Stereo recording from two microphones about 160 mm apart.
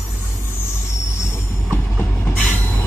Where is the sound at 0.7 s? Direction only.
15° left (ahead or behind).